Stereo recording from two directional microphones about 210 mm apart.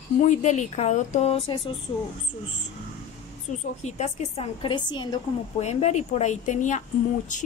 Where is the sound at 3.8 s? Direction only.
30° left (ahead or behind).